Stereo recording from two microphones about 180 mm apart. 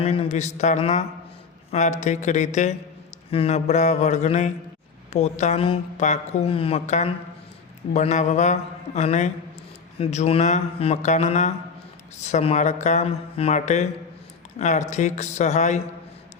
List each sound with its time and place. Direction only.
0.0 s a woman's voice: 35° left (ahead or behind)